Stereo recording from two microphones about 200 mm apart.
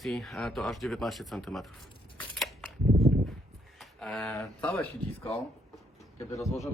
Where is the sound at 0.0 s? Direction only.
Centre (ahead or behind).